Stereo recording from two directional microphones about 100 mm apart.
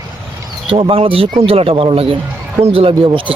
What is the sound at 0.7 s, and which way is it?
Speech, 70° right (ahead or behind).